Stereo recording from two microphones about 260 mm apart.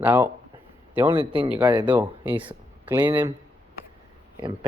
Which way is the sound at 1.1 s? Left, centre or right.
Centre.